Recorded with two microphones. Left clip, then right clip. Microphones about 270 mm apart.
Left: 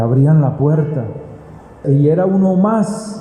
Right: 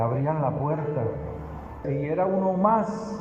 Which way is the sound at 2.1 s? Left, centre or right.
Left.